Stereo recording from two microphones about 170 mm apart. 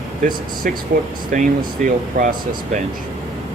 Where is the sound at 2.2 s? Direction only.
55° right (ahead or behind).